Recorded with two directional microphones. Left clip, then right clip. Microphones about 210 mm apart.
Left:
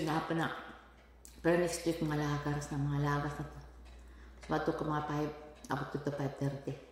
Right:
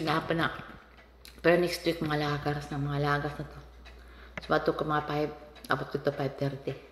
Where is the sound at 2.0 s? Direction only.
25° left (ahead or behind).